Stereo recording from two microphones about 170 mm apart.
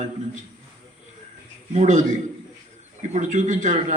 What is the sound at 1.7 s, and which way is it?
Speech, 45° right (ahead or behind).